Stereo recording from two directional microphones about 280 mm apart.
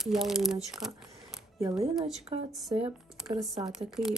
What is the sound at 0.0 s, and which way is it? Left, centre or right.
Speech, centre.